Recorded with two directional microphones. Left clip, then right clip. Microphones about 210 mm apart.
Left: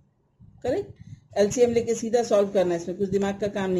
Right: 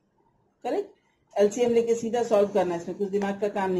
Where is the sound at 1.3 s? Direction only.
50° left (ahead or behind).